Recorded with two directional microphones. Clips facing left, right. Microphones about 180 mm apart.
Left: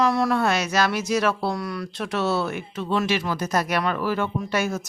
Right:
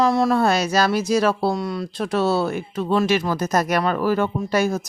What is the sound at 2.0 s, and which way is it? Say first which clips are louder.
Speech: right 4 dB; 35° right (ahead or behind).